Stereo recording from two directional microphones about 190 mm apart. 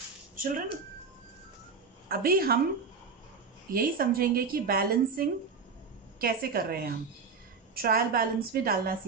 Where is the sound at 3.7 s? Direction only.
50° right (ahead or behind).